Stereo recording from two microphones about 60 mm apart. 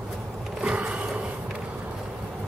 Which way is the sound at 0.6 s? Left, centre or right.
Centre.